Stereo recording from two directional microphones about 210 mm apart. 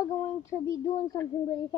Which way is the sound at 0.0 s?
15° left (ahead or behind).